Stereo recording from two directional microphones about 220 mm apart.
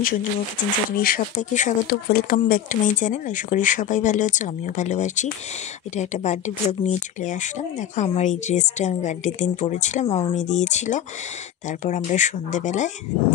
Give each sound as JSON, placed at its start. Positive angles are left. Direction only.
{"t": 0.0, "sound": "speech", "side_deg": 40}